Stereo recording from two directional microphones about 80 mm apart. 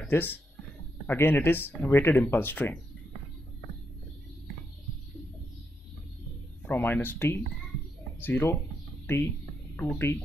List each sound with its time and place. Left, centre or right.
0.1 s speech: left
6.6 s speech: left